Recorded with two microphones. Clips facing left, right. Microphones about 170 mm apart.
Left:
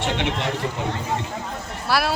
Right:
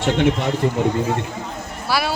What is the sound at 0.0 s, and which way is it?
Speech, 45° right (ahead or behind).